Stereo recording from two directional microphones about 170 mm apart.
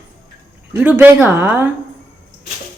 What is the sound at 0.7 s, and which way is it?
A woman's voice, 10° right (ahead or behind).